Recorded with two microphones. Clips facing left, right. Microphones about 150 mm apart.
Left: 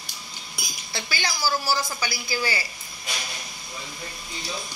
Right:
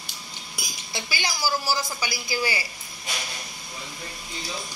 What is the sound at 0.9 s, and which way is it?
A woman's voice, 15° right (ahead or behind).